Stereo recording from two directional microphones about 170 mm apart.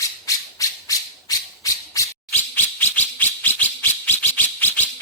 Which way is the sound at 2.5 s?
10° left (ahead or behind).